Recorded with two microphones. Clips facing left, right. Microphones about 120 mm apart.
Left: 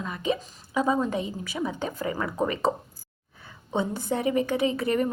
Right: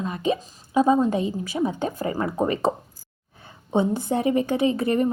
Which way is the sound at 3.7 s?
20° right (ahead or behind).